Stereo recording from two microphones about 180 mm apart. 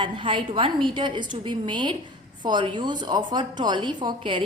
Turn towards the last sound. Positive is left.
turn(degrees=-30)  # may be behind; listen again after turning